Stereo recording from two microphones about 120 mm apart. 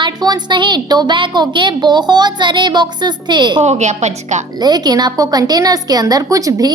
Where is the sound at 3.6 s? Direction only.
70° right (ahead or behind).